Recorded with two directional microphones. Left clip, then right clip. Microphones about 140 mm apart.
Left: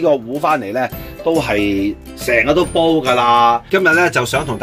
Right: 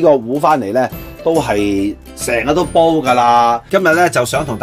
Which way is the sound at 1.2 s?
30° right (ahead or behind).